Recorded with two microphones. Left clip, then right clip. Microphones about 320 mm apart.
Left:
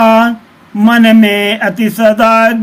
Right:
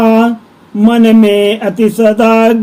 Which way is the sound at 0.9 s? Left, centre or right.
Centre.